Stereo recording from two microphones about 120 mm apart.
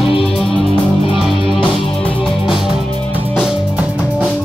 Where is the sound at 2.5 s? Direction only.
5° right (ahead or behind).